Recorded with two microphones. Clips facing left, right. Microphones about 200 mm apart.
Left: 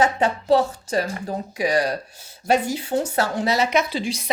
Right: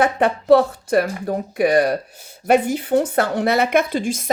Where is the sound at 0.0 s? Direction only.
60° right (ahead or behind).